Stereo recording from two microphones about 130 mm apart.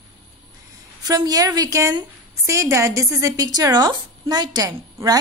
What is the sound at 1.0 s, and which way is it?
A woman's voice, 30° right (ahead or behind).